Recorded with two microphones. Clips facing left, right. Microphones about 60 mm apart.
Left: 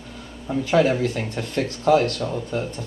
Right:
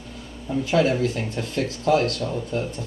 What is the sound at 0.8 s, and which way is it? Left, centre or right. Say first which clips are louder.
Speech: left 2 dB; centre.